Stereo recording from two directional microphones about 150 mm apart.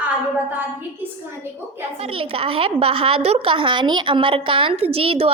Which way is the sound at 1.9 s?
40° right (ahead or behind).